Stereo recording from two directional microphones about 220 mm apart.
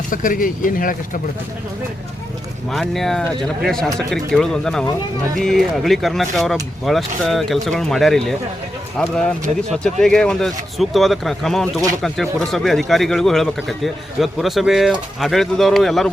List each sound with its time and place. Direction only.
0.1 s speech: 40° left (ahead or behind)
2.6 s speech: centre (ahead or behind)